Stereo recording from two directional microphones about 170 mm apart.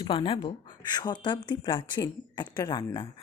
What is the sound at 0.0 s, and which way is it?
Speech, 30° left (ahead or behind).